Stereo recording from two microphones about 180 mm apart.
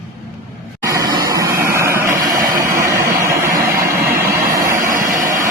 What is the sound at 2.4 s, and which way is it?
Vehicle, 50° right (ahead or behind).